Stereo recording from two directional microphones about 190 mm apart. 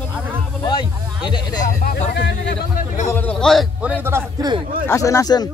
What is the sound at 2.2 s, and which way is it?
Speech, 60° left (ahead or behind).